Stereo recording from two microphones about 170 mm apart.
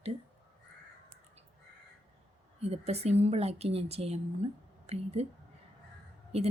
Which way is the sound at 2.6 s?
40° right (ahead or behind).